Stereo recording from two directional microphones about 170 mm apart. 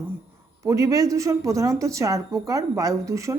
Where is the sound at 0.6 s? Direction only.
20° right (ahead or behind).